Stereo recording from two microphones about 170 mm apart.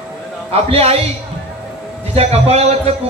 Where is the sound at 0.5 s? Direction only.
35° right (ahead or behind).